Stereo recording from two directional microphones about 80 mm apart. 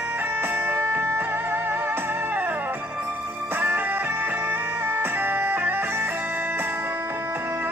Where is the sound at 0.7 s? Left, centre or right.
Right.